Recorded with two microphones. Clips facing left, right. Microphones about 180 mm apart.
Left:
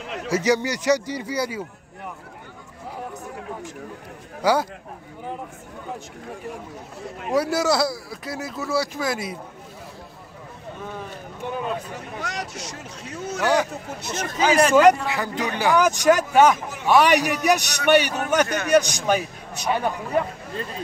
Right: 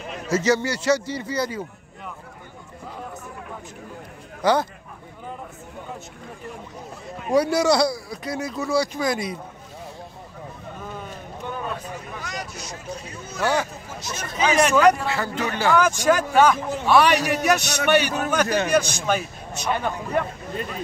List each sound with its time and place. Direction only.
0.3 s a man's voice: 15° left (ahead or behind)
4.4 s a man's voice: 10° left (ahead or behind)
7.2 s speech: centre (ahead or behind)
11.9 s a sound: 75° left (ahead or behind)
13.4 s a man's voice: 15° left (ahead or behind)
13.8 s speech: 60° left (ahead or behind)
14.7 s a man's voice: 25° left (ahead or behind)